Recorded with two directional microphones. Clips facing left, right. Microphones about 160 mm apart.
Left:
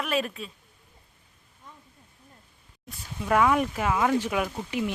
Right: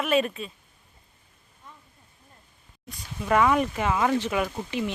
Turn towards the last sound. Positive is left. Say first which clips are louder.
# even
turn(degrees=10)  # may be behind; listen again after turning